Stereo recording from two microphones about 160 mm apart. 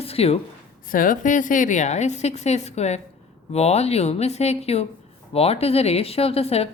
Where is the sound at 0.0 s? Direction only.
40° left (ahead or behind).